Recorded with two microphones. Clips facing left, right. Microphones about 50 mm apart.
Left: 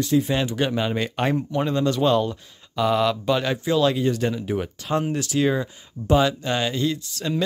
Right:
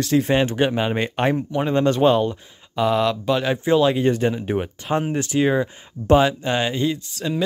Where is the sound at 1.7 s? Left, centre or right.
Right.